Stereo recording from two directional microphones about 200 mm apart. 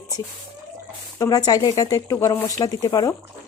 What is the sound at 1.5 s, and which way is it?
Speech, 20° left (ahead or behind).